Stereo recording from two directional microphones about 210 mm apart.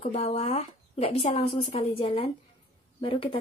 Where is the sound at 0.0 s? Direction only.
30° left (ahead or behind).